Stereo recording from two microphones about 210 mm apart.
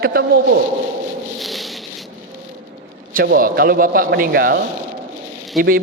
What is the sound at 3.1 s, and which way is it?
A man's voice, 45° right (ahead or behind).